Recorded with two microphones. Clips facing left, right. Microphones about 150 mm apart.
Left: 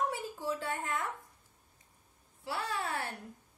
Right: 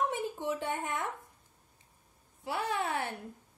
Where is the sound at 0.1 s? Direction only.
20° right (ahead or behind).